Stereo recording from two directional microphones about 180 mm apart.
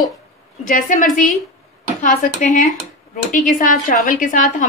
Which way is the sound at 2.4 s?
45° left (ahead or behind).